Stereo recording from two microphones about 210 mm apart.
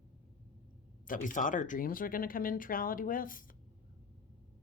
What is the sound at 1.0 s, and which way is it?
Speech, 40° left (ahead or behind).